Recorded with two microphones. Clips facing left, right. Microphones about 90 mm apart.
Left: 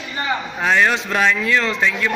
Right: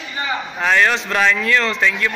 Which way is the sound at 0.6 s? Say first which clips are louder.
Even; 10° left (ahead or behind).